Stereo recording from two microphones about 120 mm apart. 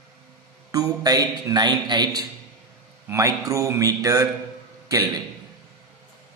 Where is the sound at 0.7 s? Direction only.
30° right (ahead or behind).